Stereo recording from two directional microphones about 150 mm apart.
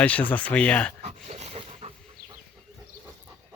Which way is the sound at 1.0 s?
50° right (ahead or behind).